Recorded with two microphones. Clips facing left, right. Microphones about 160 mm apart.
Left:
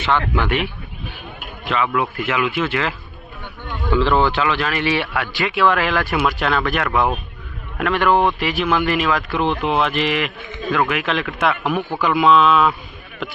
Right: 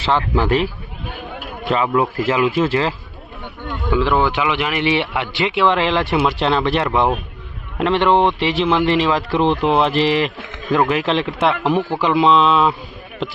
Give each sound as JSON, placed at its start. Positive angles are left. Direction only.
{"t": 0.0, "sound": "speech", "side_deg": -35}
{"t": 3.9, "sound": "speech", "side_deg": -10}